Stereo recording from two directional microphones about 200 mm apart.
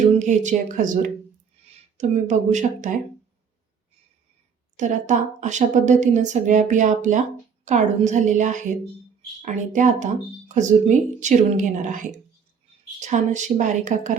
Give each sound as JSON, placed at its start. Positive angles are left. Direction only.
{"t": 0.0, "sound": "a woman's voice", "side_deg": -35}
{"t": 4.8, "sound": "a woman's voice", "side_deg": -40}